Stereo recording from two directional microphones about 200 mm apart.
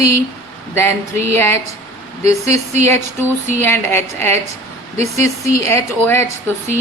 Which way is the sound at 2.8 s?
10° left (ahead or behind).